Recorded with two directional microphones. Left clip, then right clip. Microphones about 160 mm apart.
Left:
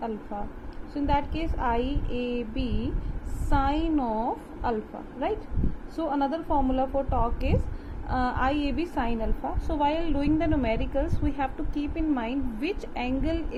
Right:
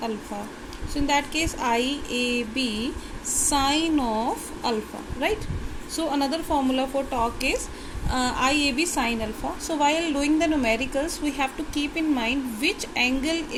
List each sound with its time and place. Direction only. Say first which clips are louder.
0.9 s a woman's voice: right 4 dB; 15° right (ahead or behind)
6.0 s a woman's voice: right 2 dB; 15° right (ahead or behind)